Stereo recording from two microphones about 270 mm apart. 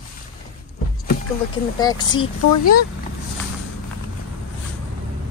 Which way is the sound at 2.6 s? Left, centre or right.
Left.